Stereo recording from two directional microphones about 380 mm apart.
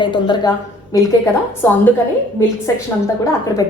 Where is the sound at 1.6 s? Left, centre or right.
Centre.